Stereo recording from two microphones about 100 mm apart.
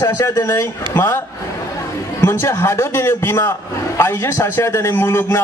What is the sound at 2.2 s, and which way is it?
A man's voice, 25° left (ahead or behind).